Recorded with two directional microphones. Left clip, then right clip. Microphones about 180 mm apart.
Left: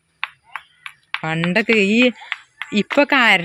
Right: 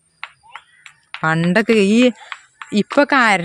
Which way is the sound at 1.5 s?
20° right (ahead or behind).